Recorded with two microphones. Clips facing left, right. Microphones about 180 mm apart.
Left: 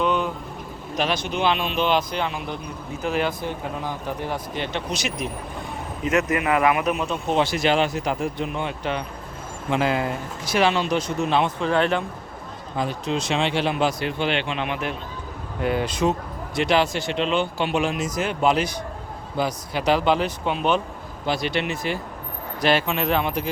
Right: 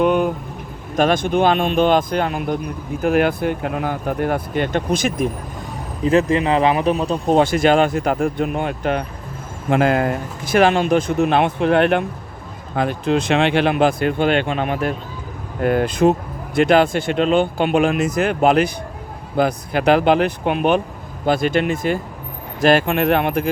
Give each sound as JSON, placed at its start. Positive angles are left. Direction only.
{"t": 0.0, "sound": "vehicle", "side_deg": -50}
{"t": 0.9, "sound": "speech", "side_deg": -50}
{"t": 3.6, "sound": "speech", "side_deg": -65}
{"t": 6.1, "sound": "speech", "side_deg": -30}